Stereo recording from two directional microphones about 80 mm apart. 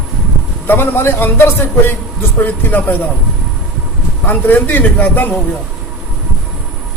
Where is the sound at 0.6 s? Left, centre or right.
Left.